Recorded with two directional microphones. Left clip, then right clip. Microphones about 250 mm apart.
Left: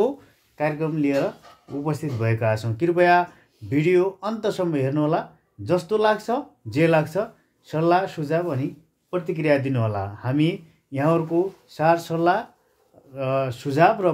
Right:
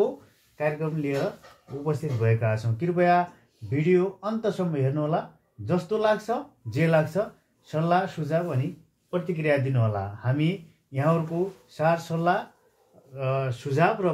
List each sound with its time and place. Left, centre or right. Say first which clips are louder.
0.6 s speech: left 4 dB; left